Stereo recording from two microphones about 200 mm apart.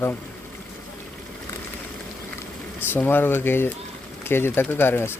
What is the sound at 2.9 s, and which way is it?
Speech, 10° left (ahead or behind).